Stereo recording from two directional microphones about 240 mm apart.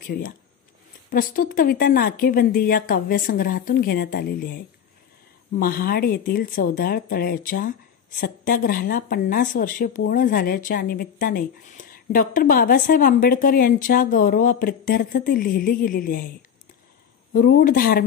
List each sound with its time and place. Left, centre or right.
0.0 s speech: left
17.3 s speech: left